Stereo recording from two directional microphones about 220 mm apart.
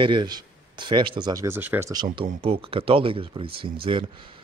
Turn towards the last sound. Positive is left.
turn(degrees=-25)  # may be behind; listen again after turning